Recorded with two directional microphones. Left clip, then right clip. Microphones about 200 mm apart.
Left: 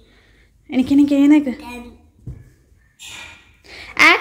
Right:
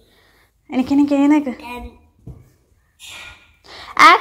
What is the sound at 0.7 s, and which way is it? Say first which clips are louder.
A woman's voice: left 1 dB; 5° left (ahead or behind).